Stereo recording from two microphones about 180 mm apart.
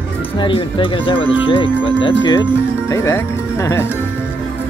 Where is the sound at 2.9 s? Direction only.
15° left (ahead or behind).